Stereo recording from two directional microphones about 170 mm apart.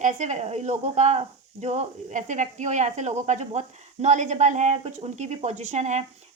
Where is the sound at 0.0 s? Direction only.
45° right (ahead or behind).